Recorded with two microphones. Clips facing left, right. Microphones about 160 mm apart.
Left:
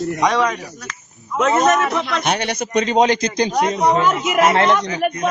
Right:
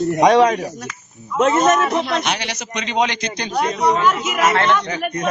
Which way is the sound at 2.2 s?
50° left (ahead or behind).